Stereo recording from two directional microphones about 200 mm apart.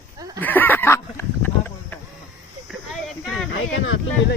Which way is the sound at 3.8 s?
70° left (ahead or behind).